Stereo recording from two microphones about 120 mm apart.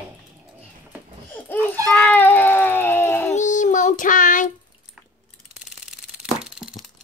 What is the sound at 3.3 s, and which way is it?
Child singing, 90° left.